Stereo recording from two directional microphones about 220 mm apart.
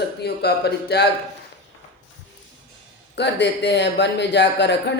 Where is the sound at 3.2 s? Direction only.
50° left (ahead or behind).